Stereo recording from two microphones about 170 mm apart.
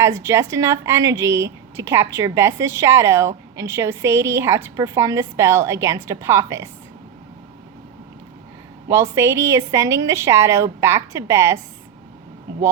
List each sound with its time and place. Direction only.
0.0 s a woman's voice: 15° right (ahead or behind)
8.9 s a woman's voice: 15° right (ahead or behind)